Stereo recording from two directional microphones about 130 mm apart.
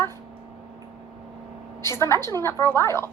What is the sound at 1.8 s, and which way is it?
Speech, 20° left (ahead or behind).